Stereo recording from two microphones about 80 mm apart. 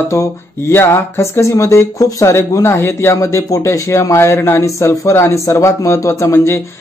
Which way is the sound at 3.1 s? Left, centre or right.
Left.